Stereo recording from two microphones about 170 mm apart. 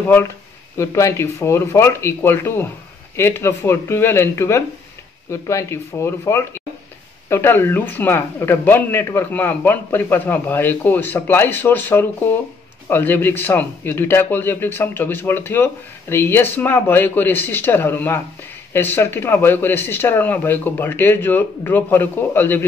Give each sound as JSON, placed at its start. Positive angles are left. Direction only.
{"t": 0.7, "sound": "speech", "side_deg": 15}